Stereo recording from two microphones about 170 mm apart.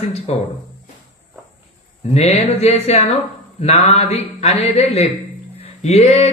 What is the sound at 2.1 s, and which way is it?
A man's voice, 40° left (ahead or behind).